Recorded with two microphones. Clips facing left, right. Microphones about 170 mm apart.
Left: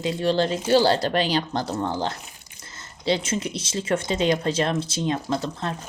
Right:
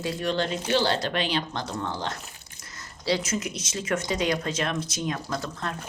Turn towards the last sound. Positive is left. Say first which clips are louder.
# left 5 dB
turn(degrees=30)  # may be behind; listen again after turning